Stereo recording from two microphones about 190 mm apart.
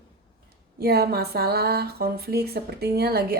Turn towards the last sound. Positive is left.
turn(degrees=-55)  # may be behind; listen again after turning